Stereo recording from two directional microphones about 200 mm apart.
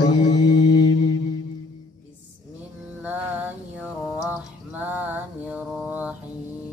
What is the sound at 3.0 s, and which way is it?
Mantra, 10° right (ahead or behind).